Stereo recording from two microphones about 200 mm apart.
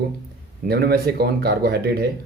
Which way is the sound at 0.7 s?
50° right (ahead or behind).